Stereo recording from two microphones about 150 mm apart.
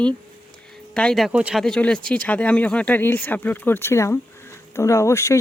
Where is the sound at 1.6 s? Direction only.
5° left (ahead or behind).